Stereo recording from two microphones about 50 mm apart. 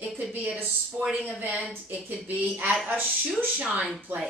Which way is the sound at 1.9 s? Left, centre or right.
Right.